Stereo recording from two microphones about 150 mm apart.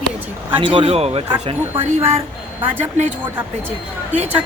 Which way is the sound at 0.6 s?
35° right (ahead or behind).